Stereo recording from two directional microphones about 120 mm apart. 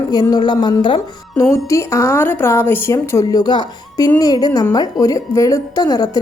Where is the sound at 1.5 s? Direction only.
25° left (ahead or behind).